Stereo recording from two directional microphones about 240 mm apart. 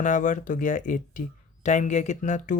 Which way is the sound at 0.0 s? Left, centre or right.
Left.